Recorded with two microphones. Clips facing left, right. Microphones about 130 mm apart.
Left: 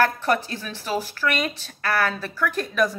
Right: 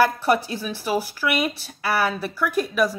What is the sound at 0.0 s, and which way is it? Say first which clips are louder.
A woman's voice: right 2 dB; 10° right (ahead or behind).